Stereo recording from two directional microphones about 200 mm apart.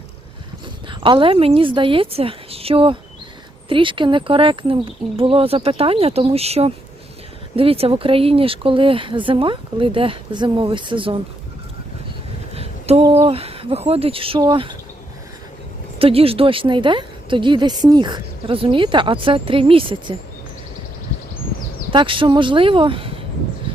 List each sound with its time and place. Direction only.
0.9 s a woman's voice: 25° right (ahead or behind)
12.5 s speech: 30° right (ahead or behind)
16.0 s a woman's voice: 30° right (ahead or behind)
21.8 s a woman's voice: 25° right (ahead or behind)